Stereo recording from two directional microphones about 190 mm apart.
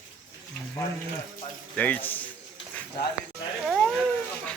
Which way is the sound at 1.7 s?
10° left (ahead or behind).